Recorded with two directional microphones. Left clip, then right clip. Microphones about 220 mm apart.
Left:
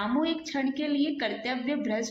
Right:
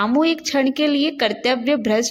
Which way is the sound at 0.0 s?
50° right (ahead or behind).